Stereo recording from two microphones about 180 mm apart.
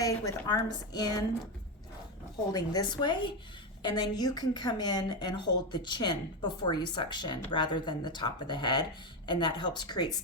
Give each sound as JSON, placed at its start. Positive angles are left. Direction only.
{"t": 0.0, "sound": "a woman's voice", "side_deg": 20}
{"t": 2.5, "sound": "a woman's voice", "side_deg": 20}